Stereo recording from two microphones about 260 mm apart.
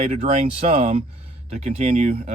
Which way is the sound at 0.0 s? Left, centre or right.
Right.